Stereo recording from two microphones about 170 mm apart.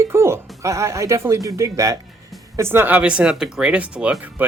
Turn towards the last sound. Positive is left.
turn(degrees=-10)  # may be behind; listen again after turning